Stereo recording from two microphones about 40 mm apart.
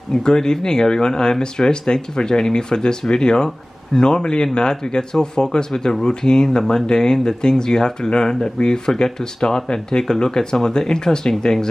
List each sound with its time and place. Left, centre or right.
0.1 s speech: centre